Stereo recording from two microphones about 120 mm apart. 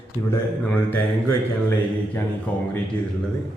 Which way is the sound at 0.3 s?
15° left (ahead or behind).